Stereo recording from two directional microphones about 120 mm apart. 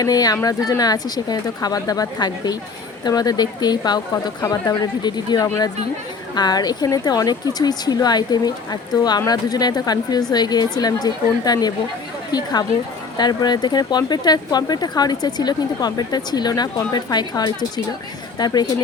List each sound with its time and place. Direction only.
0.0 s speech: 30° left (ahead or behind)